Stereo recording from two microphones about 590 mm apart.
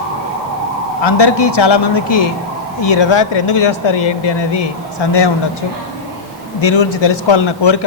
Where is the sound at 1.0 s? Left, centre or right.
Left.